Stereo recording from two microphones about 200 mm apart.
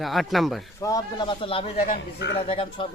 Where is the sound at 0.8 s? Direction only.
15° left (ahead or behind).